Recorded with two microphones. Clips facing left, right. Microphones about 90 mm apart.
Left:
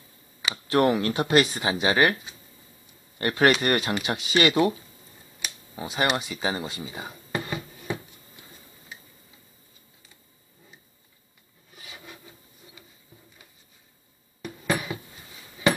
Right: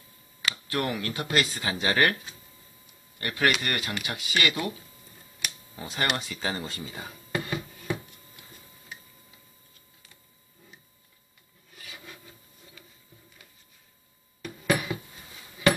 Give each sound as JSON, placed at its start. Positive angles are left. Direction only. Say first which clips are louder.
{"t": 0.7, "sound": "speech", "louder": "left 9 dB", "side_deg": 25}
{"t": 3.2, "sound": "speech", "louder": "left 5 dB", "side_deg": 30}
{"t": 5.8, "sound": "speech", "louder": "left 4 dB", "side_deg": 10}
{"t": 7.5, "sound": "a sound", "louder": "even", "side_deg": 0}
{"t": 12.0, "sound": "wood", "louder": "left 1 dB", "side_deg": 10}
{"t": 14.7, "sound": "a sound", "louder": "right 1 dB", "side_deg": 0}